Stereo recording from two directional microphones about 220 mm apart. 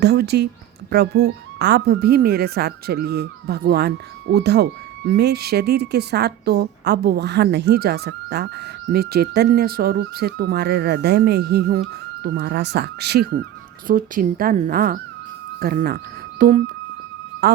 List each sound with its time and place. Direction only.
0.0 s a woman's voice: 50° right (ahead or behind)